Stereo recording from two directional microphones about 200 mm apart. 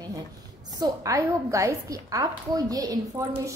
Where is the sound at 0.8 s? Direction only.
15° right (ahead or behind).